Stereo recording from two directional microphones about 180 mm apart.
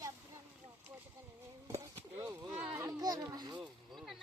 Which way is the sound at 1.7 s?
20° right (ahead or behind).